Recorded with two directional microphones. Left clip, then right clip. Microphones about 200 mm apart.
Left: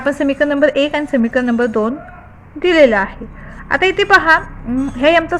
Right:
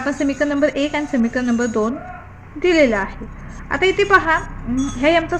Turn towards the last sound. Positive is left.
turn(degrees=35)  # may be behind; listen again after turning